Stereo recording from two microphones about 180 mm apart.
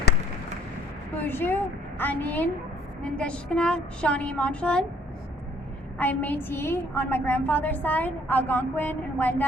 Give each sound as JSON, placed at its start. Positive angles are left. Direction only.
{"t": 1.1, "sound": "a woman's voice", "side_deg": 10}
{"t": 6.0, "sound": "a woman's voice", "side_deg": 10}